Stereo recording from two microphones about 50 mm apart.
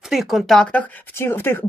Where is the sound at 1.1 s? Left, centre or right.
Left.